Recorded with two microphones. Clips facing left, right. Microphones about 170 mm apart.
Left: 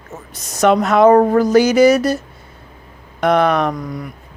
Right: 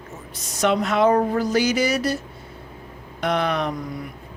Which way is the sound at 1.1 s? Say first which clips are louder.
Left 8 dB; 75° left (ahead or behind).